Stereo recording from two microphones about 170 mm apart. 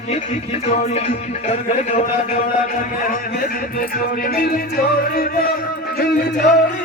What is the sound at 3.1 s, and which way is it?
Music, 55° left (ahead or behind).